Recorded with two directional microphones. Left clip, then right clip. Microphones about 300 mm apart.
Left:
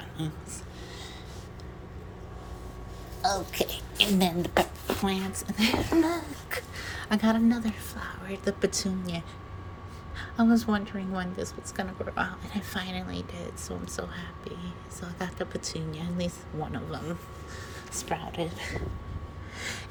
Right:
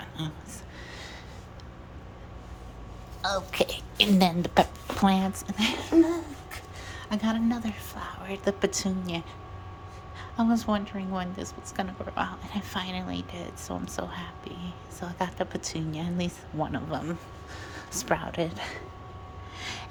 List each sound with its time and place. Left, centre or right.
3.2 s a woman's voice: centre
19.5 s vehicle: centre